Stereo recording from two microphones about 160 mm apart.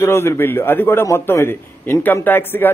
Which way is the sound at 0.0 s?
15° left (ahead or behind).